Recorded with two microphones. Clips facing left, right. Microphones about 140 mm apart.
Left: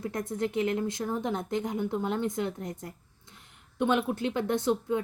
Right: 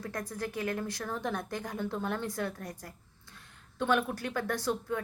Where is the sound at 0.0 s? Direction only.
20° left (ahead or behind).